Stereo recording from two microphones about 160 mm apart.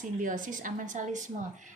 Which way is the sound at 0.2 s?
55° right (ahead or behind).